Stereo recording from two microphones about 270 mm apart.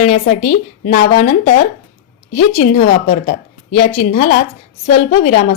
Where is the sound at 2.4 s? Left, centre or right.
Left.